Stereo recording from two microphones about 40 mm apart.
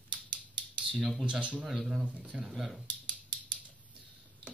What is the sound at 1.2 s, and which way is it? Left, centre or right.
Speech, right.